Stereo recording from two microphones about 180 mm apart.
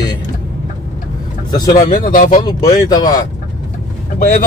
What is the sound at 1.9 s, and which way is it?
Speech, 50° left (ahead or behind).